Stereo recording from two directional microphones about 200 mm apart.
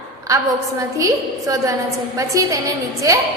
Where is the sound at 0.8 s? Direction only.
15° right (ahead or behind).